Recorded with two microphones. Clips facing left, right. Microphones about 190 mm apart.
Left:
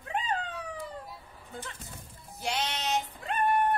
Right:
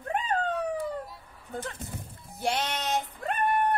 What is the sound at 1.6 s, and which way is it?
Speech, 55° right (ahead or behind).